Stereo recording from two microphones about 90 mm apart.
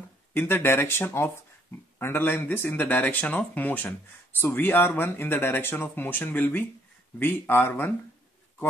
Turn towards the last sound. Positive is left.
turn(degrees=25)  # may be behind; listen again after turning